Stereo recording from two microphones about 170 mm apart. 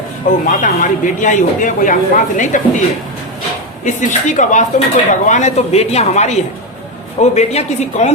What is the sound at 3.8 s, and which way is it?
Speech, 45° left (ahead or behind).